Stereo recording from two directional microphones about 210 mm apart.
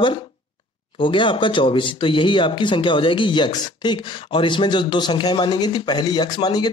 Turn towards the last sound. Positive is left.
turn(degrees=20)  # may be behind; listen again after turning